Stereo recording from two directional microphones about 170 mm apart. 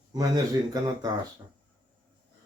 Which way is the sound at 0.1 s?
20° right (ahead or behind).